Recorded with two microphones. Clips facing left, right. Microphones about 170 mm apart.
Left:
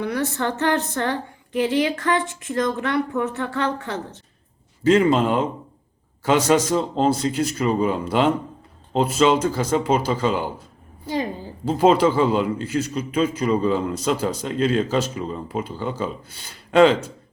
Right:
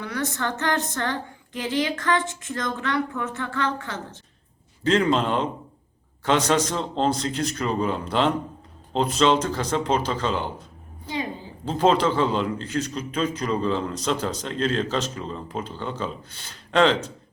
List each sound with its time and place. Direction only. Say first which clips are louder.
0.0 s a woman's voice: left 4 dB; 30° left (ahead or behind)
4.8 s a man's voice: left 4 dB; 10° left (ahead or behind)
11.6 s a man's voice: left 4 dB; 10° left (ahead or behind)